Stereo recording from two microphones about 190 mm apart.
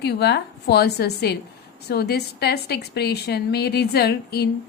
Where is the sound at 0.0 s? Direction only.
60° left (ahead or behind).